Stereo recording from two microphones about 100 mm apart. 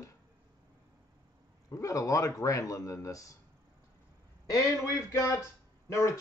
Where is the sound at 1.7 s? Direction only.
30° left (ahead or behind).